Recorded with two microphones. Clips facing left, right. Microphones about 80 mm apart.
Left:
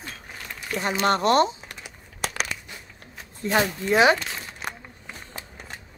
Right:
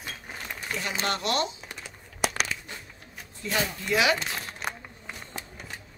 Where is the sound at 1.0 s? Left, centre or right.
Left.